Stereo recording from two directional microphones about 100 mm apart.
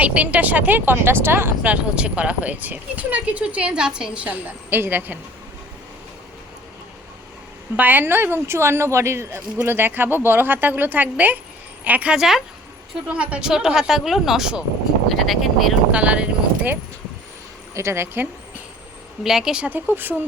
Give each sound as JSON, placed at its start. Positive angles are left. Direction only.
{"t": 0.0, "sound": "speech", "side_deg": -15}
{"t": 7.8, "sound": "a woman's voice", "side_deg": -20}
{"t": 15.9, "sound": "speech", "side_deg": -10}
{"t": 17.7, "sound": "a woman's voice", "side_deg": -25}
{"t": 19.2, "sound": "speech", "side_deg": -5}